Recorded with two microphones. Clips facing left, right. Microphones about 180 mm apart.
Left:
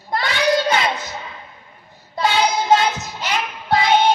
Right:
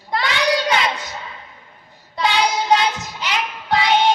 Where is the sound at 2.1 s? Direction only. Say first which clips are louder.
Left 1 dB; 45° left (ahead or behind).